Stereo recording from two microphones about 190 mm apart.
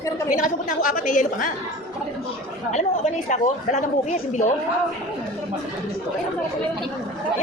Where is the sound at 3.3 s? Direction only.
40° left (ahead or behind).